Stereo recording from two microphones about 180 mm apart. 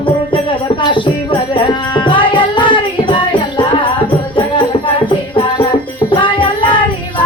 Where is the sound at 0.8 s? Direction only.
25° left (ahead or behind).